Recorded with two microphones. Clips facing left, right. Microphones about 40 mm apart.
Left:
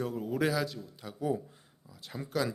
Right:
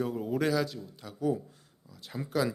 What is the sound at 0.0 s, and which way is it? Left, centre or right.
Speech, centre.